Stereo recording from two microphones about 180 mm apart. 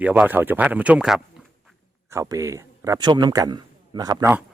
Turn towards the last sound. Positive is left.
turn(degrees=-20)  # may be behind; listen again after turning